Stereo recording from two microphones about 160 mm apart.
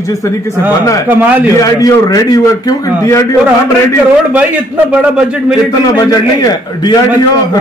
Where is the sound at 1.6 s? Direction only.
20° left (ahead or behind).